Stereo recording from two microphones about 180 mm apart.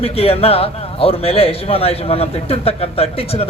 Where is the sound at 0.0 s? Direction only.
35° left (ahead or behind).